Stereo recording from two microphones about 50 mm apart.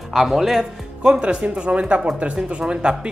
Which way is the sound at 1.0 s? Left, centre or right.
Centre.